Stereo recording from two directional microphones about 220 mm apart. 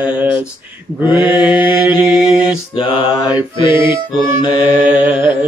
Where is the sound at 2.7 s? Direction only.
25° left (ahead or behind).